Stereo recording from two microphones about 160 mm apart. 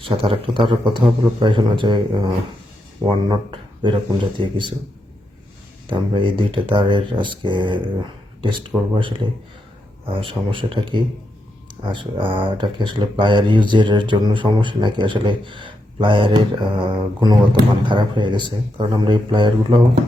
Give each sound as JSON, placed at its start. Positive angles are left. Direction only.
{"t": 0.0, "sound": "speech", "side_deg": -35}
{"t": 5.9, "sound": "speech", "side_deg": -30}
{"t": 10.2, "sound": "speech", "side_deg": -30}